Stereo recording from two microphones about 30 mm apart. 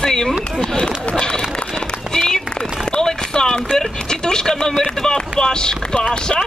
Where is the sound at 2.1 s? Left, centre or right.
Centre.